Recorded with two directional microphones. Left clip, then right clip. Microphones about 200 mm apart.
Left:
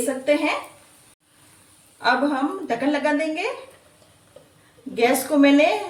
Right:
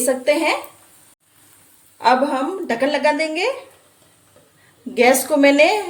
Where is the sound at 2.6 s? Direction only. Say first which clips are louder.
Right 7 dB; 50° right (ahead or behind).